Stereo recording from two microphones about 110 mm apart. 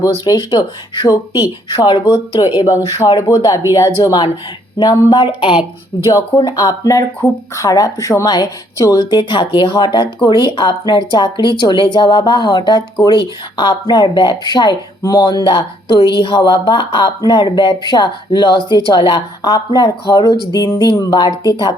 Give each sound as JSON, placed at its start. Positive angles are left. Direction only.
{"t": 0.0, "sound": "speech", "side_deg": 35}
{"t": 6.6, "sound": "speech", "side_deg": 30}